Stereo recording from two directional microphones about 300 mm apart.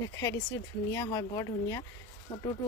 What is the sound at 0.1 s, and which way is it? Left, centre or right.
Speech, centre.